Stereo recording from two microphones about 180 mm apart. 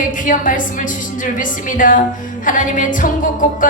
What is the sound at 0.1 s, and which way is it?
A woman's voice, 45° left (ahead or behind).